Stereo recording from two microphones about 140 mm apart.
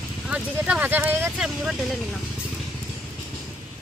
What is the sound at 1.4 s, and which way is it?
Vehicle, 5° right (ahead or behind).